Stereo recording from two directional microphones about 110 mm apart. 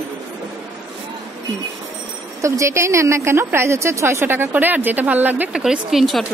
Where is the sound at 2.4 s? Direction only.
25° right (ahead or behind); by 6.2 s centre (ahead or behind).